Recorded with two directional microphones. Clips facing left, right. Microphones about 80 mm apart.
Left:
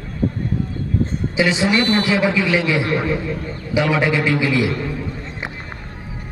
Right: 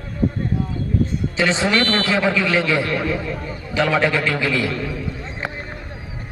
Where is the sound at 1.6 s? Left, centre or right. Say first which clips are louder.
Left 2 dB; centre.